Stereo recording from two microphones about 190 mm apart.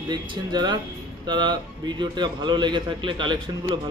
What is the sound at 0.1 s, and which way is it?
A man's voice, 20° right (ahead or behind).